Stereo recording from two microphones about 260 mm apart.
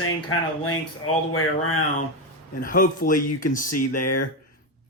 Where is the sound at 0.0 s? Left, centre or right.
Left.